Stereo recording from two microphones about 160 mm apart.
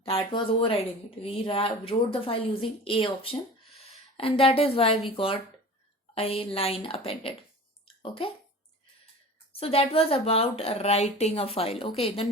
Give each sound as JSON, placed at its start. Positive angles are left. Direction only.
{"t": 0.0, "sound": "speech", "side_deg": 35}
{"t": 9.5, "sound": "speech", "side_deg": 35}